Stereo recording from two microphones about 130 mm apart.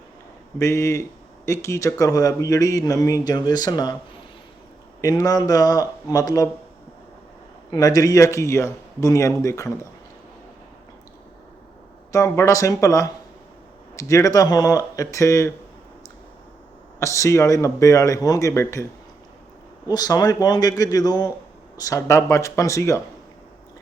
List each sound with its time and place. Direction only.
0.6 s speech: 20° left (ahead or behind)
4.9 s speech: 25° left (ahead or behind)
7.7 s speech: 30° left (ahead or behind)
12.1 s speech: 25° left (ahead or behind)
17.0 s speech: 25° left (ahead or behind)
19.9 s speech: 30° left (ahead or behind)